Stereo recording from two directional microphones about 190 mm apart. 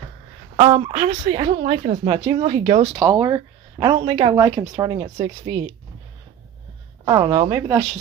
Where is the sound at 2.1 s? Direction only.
25° right (ahead or behind).